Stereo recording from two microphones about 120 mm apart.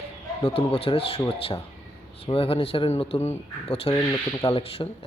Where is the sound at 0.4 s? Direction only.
50° left (ahead or behind).